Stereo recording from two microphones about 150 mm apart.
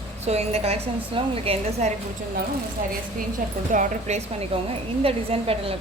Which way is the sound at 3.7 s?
55° right (ahead or behind).